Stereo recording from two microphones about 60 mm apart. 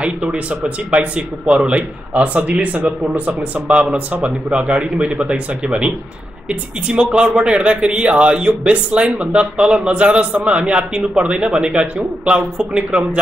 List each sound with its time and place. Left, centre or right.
0.0 s speech: centre